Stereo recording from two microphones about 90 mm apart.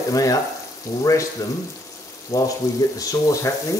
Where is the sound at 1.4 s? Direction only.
40° left (ahead or behind).